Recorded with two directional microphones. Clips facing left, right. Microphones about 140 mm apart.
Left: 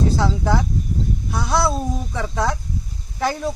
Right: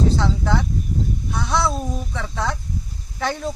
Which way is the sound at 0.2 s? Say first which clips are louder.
Left 2 dB; 10° left (ahead or behind).